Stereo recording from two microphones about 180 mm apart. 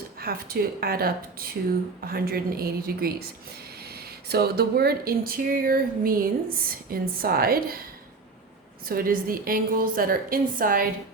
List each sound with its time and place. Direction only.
0.2 s speech: 55° right (ahead or behind)
8.9 s a woman's voice: 55° right (ahead or behind)